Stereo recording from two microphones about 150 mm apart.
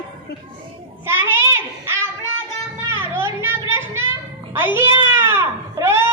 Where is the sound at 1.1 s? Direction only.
15° right (ahead or behind).